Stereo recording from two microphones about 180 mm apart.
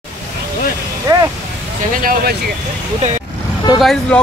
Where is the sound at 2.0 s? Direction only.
55° right (ahead or behind).